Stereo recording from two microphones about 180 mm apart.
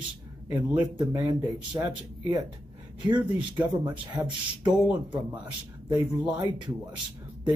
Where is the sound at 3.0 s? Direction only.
25° right (ahead or behind).